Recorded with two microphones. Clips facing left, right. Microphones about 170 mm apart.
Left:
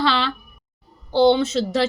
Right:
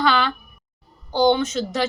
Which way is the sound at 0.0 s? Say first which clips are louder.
Right 1 dB; 30° left (ahead or behind).